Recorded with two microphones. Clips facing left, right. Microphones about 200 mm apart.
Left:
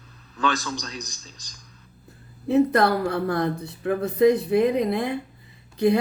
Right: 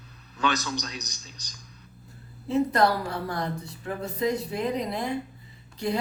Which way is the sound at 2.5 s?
60° left (ahead or behind).